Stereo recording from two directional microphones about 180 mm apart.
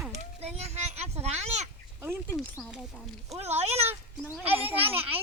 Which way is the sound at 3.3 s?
35° right (ahead or behind).